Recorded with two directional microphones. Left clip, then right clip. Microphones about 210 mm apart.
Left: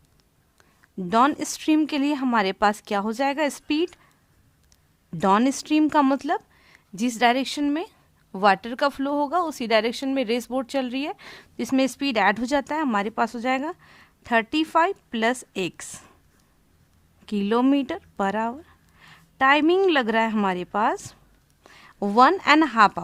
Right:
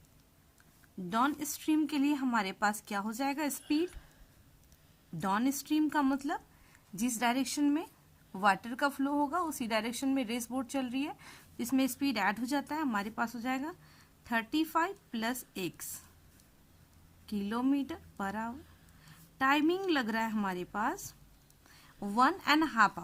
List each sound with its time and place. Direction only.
1.1 s speech: 45° left (ahead or behind)
5.1 s speech: 45° left (ahead or behind)
17.2 s a woman's voice: 45° left (ahead or behind)